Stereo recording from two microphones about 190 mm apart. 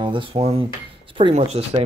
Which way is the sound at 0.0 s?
25° right (ahead or behind).